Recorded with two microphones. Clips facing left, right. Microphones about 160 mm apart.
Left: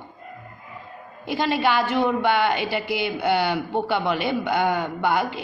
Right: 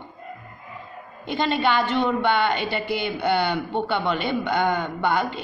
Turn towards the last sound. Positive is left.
turn(degrees=10)  # may be behind; listen again after turning